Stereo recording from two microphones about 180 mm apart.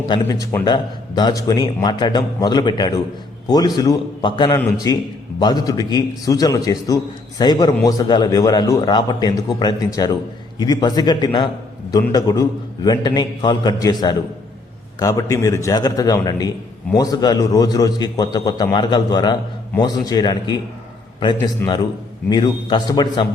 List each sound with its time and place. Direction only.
0.1 s a man's voice: 20° left (ahead or behind)
14.9 s a man's voice: 20° left (ahead or behind)
22.3 s a man's voice: 25° left (ahead or behind)